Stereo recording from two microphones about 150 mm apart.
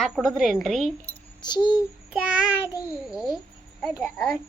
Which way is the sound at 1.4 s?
30° left (ahead or behind).